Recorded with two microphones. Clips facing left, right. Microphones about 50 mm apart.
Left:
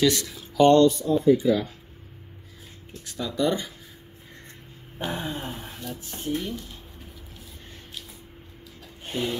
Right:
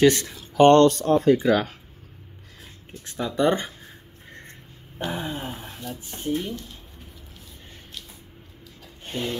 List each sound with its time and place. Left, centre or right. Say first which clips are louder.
0.0 s speech: right 4 dB; right
0.6 s speech: right 2 dB; right
3.1 s speech: right 3 dB; right
4.9 s speech: right 1 dB; centre
9.0 s a sound: left 1 dB; centre